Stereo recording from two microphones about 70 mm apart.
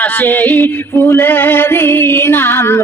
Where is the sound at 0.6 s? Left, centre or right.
Left.